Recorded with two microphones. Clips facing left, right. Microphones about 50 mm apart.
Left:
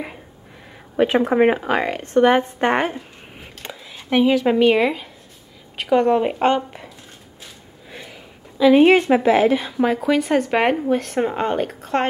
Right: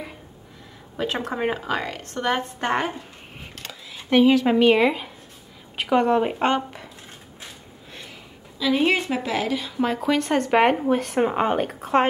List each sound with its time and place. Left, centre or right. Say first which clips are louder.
1.0 s speech: left 9 dB; centre
1.3 s a woman's voice: left 8 dB; left
3.9 s a woman's voice: even; centre
7.9 s a sound: left 4 dB; centre
8.5 s a woman's voice: left 9 dB; left
9.8 s speech: left 4 dB; centre